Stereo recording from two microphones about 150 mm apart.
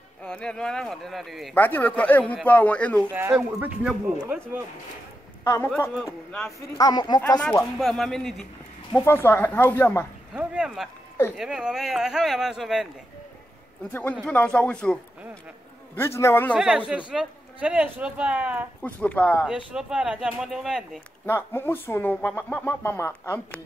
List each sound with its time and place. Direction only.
0.2 s speech: 5° left (ahead or behind)
1.5 s speech: 10° left (ahead or behind)
3.1 s speech: 15° right (ahead or behind)
5.4 s a man's voice: 15° left (ahead or behind)
6.8 s speech: 25° left (ahead or behind)
7.8 s speech: 5° left (ahead or behind)
8.9 s speech: 15° left (ahead or behind)
10.3 s speech: 5° right (ahead or behind)
14.2 s speech: 5° left (ahead or behind)
16.0 s speech: 15° left (ahead or behind)
16.5 s speech: 5° right (ahead or behind)
18.8 s speech: 10° left (ahead or behind)
19.4 s speech: 5° right (ahead or behind)
21.3 s speech: 15° left (ahead or behind)